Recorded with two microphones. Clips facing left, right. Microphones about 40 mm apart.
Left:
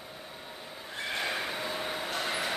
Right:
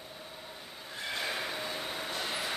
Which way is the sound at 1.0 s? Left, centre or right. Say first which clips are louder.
Left 3 dB; left.